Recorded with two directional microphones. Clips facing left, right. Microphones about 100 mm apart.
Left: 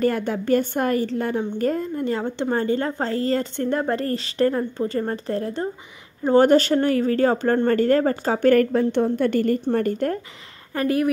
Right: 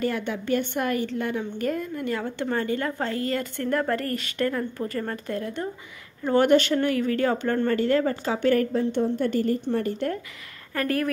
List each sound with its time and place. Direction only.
0.0 s a woman's voice: 40° left (ahead or behind)
8.5 s a woman's voice: 65° left (ahead or behind)
9.7 s speech: 45° left (ahead or behind)
10.7 s a woman's voice: 20° left (ahead or behind)